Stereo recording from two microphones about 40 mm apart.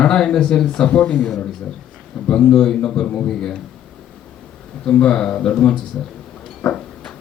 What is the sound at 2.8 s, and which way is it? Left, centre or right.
Speech, left.